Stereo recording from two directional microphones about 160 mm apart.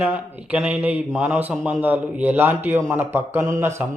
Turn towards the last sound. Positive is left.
turn(degrees=-15)  # may be behind; listen again after turning